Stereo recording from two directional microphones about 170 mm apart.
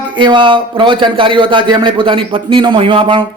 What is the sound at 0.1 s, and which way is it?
Speech, 30° right (ahead or behind).